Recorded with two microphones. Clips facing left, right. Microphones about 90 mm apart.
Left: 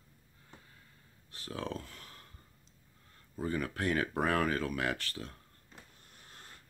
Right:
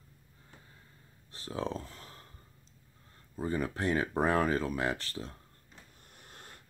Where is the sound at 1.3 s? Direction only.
30° right (ahead or behind).